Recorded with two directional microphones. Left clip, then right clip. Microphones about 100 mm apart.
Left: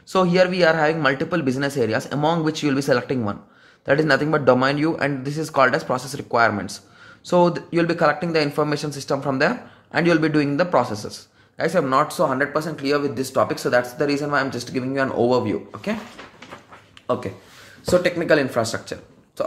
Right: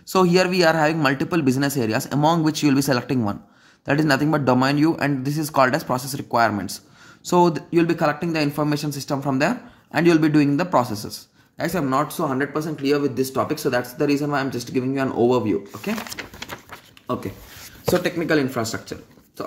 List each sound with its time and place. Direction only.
0.1 s a man's voice: 60° right (ahead or behind); by 12.0 s 35° right (ahead or behind)
12.0 s speech: 20° right (ahead or behind)
17.1 s speech: 20° right (ahead or behind)